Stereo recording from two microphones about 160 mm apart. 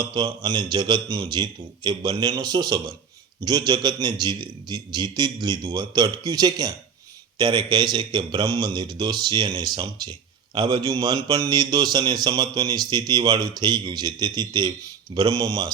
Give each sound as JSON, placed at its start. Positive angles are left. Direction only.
{"t": 0.0, "sound": "speech", "side_deg": -30}